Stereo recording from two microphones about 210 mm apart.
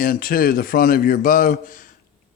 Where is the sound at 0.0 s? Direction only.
40° left (ahead or behind).